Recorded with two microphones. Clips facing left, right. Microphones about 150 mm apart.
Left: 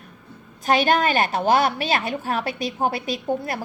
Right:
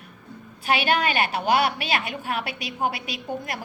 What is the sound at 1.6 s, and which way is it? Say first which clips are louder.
A woman's voice: left 3 dB; 15° right (ahead or behind).